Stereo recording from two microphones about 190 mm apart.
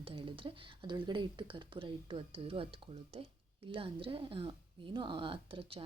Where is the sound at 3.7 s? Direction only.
30° right (ahead or behind).